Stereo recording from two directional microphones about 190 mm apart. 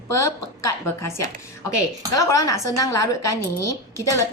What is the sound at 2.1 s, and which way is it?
Speech, 15° left (ahead or behind).